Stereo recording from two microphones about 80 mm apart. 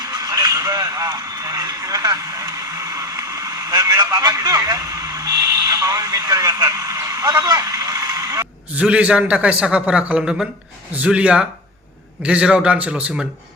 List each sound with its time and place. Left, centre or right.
0.0 s speech: right
8.7 s a man's voice: centre